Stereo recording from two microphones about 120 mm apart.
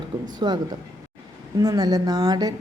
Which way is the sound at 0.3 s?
40° right (ahead or behind).